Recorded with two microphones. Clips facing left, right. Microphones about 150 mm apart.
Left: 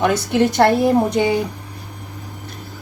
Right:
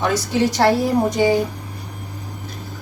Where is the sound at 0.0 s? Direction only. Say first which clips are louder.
Left 2 dB; 55° left (ahead or behind).